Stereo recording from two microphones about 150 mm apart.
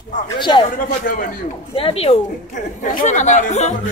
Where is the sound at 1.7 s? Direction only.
40° left (ahead or behind).